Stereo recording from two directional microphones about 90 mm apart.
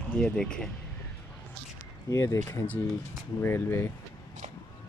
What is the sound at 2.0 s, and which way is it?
Speech, 35° left (ahead or behind).